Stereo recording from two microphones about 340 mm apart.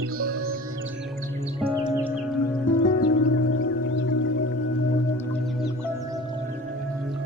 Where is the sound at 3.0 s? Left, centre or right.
Left.